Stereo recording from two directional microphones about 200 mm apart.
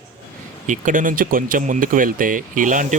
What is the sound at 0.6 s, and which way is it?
Speech, 40° right (ahead or behind).